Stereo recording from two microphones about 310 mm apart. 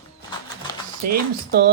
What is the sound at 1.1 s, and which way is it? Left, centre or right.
Speech, right.